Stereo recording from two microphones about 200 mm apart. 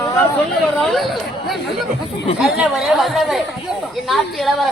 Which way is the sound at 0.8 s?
Centre (ahead or behind).